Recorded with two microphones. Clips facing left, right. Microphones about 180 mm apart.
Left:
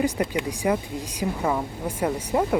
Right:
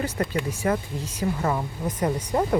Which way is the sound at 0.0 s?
15° left (ahead or behind).